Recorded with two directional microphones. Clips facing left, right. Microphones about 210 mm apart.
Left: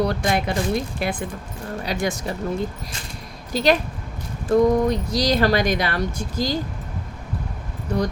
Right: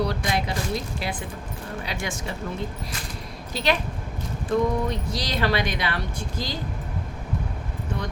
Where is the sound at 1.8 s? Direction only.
40° left (ahead or behind).